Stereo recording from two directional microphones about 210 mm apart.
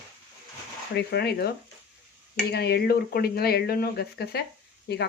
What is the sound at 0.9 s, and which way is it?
Speech, 50° left (ahead or behind).